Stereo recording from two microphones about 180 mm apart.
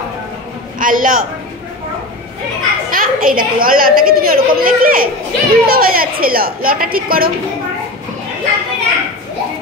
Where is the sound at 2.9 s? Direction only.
50° right (ahead or behind).